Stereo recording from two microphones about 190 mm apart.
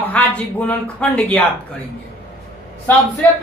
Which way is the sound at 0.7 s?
5° left (ahead or behind).